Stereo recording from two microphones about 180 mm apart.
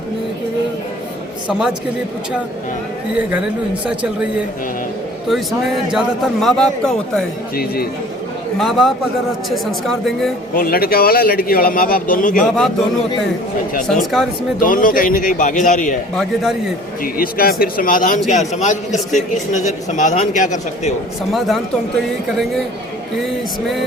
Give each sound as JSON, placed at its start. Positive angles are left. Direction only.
{"t": 1.5, "sound": "a man's voice", "side_deg": -5}
{"t": 3.2, "sound": "a man's voice", "side_deg": -5}
{"t": 7.5, "sound": "a man's voice", "side_deg": 55}
{"t": 8.5, "sound": "a man's voice", "side_deg": 0}
{"t": 10.5, "sound": "a man's voice", "side_deg": 55}
{"t": 13.8, "sound": "a man's voice", "side_deg": 0}
{"t": 14.6, "sound": "a man's voice", "side_deg": 50}
{"t": 16.1, "sound": "a man's voice", "side_deg": 0}
{"t": 17.0, "sound": "a man's voice", "side_deg": 55}
{"t": 21.3, "sound": "a man's voice", "side_deg": 0}